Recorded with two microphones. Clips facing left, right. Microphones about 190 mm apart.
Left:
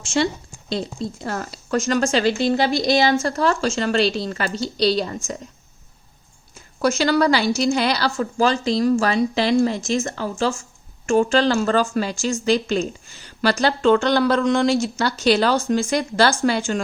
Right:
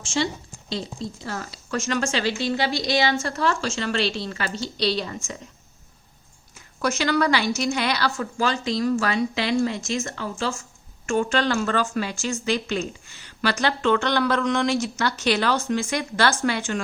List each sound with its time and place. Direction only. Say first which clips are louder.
0.0 s a woman's voice: left 4 dB; 60° left (ahead or behind)
1.7 s speech: left 6 dB; 35° left (ahead or behind)
6.5 s speech: left 5 dB; 30° left (ahead or behind)